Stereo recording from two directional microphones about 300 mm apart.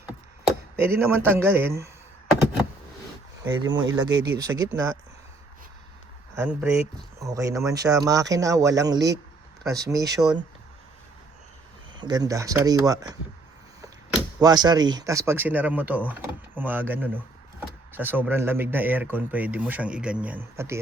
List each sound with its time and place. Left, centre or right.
0.8 s speech: centre
3.6 s speech: right
3.8 s speech: centre
6.3 s speech: centre
11.9 s speech: centre
14.3 s speech: centre